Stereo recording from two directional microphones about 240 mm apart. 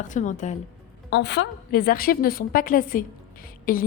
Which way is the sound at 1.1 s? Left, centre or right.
Left.